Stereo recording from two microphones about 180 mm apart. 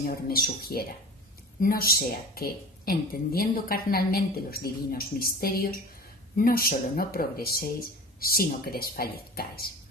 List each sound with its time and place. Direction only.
0.0 s a woman's voice: 55° left (ahead or behind)